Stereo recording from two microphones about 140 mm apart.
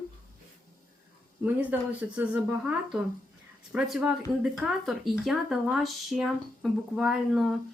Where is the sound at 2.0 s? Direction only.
10° right (ahead or behind).